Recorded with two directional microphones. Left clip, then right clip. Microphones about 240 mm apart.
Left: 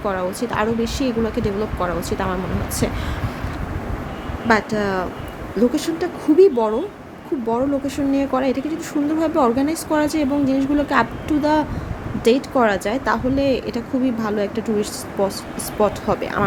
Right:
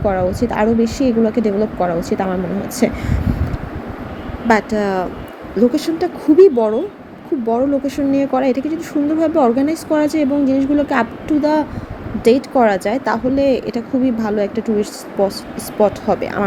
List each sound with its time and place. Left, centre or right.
0.0 s speech: centre
4.4 s speech: centre